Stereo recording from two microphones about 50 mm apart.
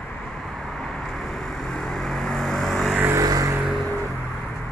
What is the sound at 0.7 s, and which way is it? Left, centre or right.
Vehicle, centre.